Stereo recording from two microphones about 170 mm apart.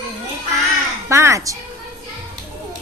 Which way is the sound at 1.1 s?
15° right (ahead or behind).